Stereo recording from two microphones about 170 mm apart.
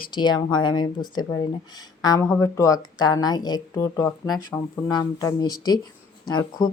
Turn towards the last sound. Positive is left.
turn(degrees=25)  # may be behind; listen again after turning